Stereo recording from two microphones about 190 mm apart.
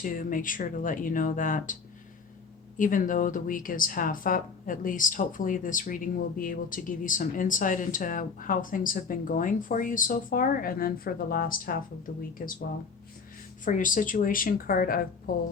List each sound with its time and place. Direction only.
0.0 s speech: 45° left (ahead or behind)
13.7 s speech: 45° left (ahead or behind)